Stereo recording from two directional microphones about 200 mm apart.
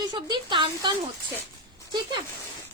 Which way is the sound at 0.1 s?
20° right (ahead or behind).